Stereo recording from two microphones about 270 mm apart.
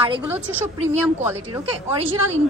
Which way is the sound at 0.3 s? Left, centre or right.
Centre.